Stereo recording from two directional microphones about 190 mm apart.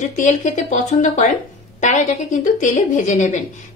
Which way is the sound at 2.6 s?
40° left (ahead or behind).